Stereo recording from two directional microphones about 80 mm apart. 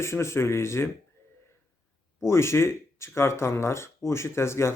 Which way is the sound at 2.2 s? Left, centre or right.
Left.